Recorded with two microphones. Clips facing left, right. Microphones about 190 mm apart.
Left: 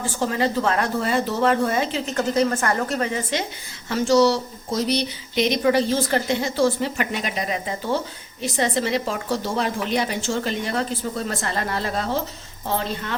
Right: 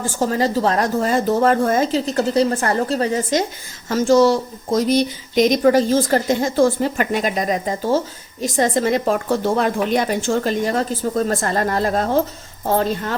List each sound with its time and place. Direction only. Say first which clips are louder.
0.2 s speech: right 4 dB; 40° right (ahead or behind)